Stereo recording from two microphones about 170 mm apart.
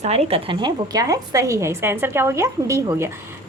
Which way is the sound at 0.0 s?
40° right (ahead or behind).